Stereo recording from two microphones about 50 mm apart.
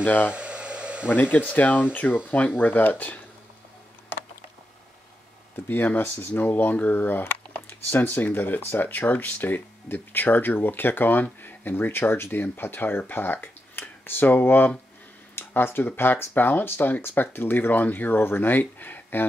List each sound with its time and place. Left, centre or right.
0.0 s speech: left
0.3 s a sound: right
1.0 s speech: left
5.9 s speech: left
6.4 s speech: left